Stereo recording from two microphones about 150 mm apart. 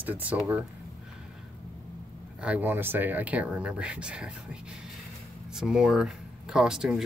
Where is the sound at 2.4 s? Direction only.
10° right (ahead or behind).